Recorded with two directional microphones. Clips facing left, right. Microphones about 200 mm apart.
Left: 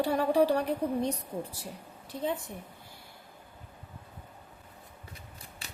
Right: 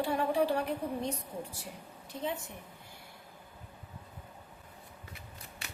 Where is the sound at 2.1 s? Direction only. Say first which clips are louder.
Left 4 dB; 35° left (ahead or behind).